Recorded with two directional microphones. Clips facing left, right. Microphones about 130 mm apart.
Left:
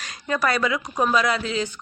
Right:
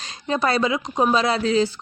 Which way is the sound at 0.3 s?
25° right (ahead or behind).